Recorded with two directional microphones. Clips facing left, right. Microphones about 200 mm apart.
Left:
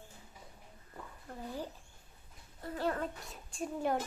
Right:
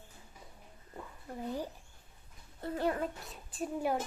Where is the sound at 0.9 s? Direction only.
15° right (ahead or behind).